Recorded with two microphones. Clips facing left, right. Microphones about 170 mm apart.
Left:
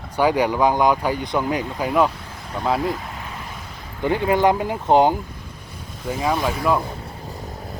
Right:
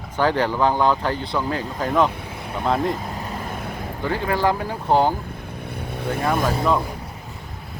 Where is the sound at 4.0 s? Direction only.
20° left (ahead or behind).